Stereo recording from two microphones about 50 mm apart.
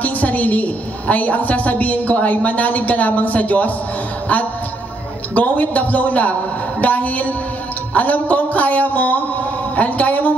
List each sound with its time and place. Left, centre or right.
0.0 s a woman's voice: left
5.3 s a woman's voice: left
7.9 s music: left
9.8 s a sound: left